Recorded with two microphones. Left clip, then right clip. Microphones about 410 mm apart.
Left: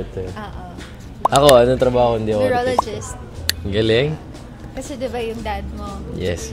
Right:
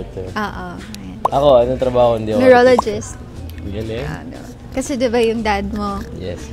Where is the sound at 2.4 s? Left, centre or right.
Right.